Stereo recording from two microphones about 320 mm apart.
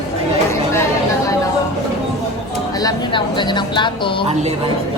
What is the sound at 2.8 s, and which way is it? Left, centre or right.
A woman's voice, centre.